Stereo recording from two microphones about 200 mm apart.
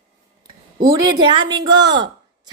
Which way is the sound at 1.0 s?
20° right (ahead or behind).